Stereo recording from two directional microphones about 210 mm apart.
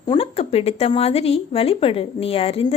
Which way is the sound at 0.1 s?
30° left (ahead or behind).